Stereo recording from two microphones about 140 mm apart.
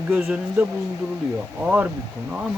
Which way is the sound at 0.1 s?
5° right (ahead or behind).